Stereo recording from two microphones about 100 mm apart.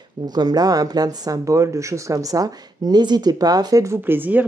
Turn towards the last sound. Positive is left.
turn(degrees=-20)  # may be behind; listen again after turning